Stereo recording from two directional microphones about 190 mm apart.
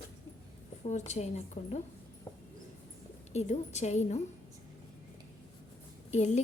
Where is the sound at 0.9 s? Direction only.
35° left (ahead or behind).